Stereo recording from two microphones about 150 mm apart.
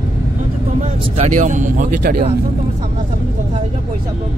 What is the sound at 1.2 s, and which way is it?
Speech, 55° right (ahead or behind).